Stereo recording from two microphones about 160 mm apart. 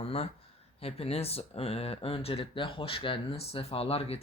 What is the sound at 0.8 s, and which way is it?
Speech, 40° left (ahead or behind).